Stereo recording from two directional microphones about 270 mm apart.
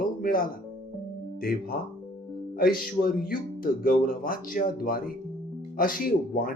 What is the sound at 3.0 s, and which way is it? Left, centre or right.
Speech, left.